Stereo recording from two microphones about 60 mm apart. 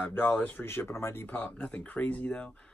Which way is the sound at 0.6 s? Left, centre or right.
Left.